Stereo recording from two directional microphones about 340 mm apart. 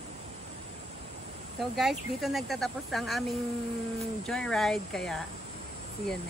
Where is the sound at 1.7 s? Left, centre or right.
Centre.